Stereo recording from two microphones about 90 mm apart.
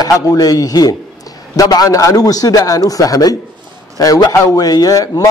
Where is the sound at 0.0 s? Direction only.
45° left (ahead or behind).